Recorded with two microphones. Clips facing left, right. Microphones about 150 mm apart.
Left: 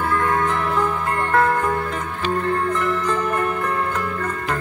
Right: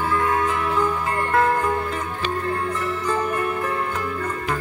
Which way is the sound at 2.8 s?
60° left (ahead or behind).